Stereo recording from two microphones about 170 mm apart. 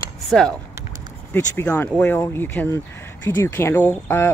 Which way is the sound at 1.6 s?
10° left (ahead or behind).